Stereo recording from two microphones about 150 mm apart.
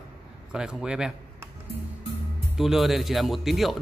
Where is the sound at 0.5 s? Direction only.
5° right (ahead or behind).